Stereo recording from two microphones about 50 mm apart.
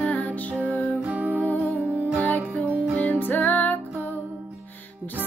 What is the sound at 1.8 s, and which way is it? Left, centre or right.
Music, right.